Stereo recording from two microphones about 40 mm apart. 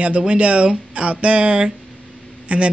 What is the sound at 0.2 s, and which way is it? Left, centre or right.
Speech, right.